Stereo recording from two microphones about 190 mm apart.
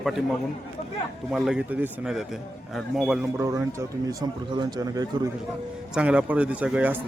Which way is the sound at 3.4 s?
15° right (ahead or behind).